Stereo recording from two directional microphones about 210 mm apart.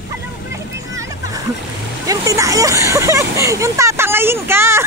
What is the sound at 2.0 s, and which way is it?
Speech, 15° right (ahead or behind).